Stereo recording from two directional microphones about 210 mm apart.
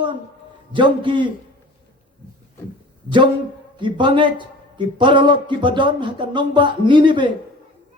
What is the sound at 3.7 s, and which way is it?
A man's voice, 20° right (ahead or behind).